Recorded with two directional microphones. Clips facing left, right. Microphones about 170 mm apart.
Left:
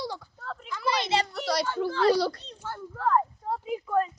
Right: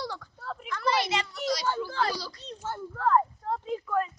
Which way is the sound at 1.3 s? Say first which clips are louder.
Left 1 dB; 60° left (ahead or behind).